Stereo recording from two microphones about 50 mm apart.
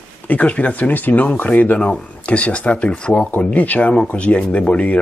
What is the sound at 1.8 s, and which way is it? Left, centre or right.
Speech, left.